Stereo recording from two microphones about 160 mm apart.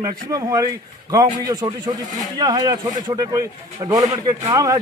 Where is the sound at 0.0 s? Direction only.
25° right (ahead or behind).